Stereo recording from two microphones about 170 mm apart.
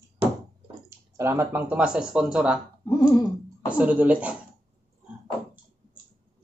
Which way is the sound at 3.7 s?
10° right (ahead or behind).